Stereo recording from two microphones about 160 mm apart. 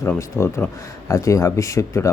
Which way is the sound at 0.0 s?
15° left (ahead or behind).